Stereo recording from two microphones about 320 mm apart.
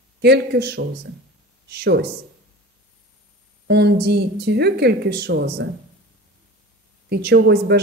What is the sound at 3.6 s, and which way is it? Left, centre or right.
Speech, right.